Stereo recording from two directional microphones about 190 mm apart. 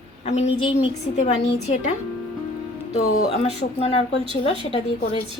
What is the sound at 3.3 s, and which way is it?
Speech, 35° left (ahead or behind).